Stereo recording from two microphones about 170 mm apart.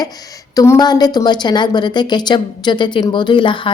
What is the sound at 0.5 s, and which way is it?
A woman's voice, 20° left (ahead or behind).